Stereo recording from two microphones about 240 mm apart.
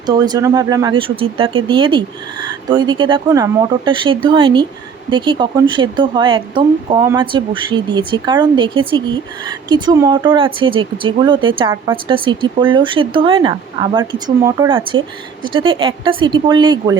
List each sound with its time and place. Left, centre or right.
0.0 s speech: centre